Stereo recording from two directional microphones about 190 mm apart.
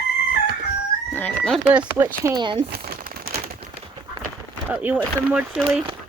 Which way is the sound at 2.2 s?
20° right (ahead or behind).